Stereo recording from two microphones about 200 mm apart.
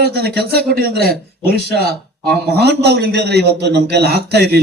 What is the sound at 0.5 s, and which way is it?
A man's voice, 50° right (ahead or behind).